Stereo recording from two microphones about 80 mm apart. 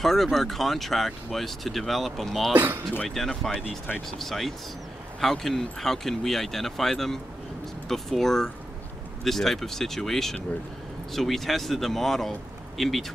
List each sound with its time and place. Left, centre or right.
0.0 s speech: centre
2.5 s speech: right
3.2 s speech: centre